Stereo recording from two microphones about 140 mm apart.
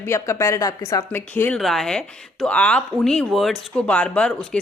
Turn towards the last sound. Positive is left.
turn(degrees=5)  # may be behind; listen again after turning